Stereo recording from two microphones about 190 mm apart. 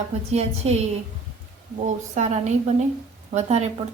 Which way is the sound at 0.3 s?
35° right (ahead or behind).